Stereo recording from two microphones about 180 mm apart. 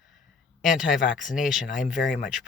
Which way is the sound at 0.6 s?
5° right (ahead or behind).